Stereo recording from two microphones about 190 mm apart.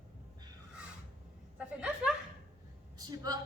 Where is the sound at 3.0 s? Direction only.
20° right (ahead or behind).